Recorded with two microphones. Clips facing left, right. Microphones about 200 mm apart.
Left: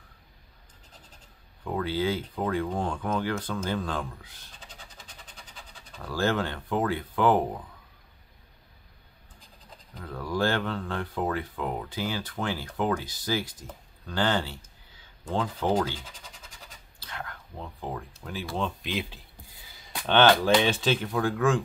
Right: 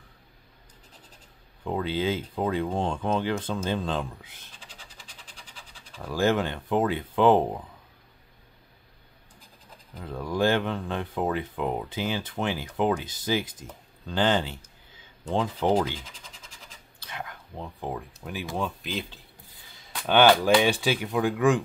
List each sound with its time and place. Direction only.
1.6 s speech: 20° right (ahead or behind)
6.0 s speech: 20° right (ahead or behind)
10.0 s speech: 20° right (ahead or behind)
17.0 s a sound: 20° right (ahead or behind)
18.2 s speech: 15° right (ahead or behind)
18.6 s speech: centre (ahead or behind)
20.1 s speech: 10° right (ahead or behind)